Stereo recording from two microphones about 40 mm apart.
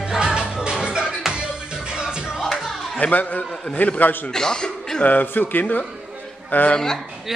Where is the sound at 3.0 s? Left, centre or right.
Left.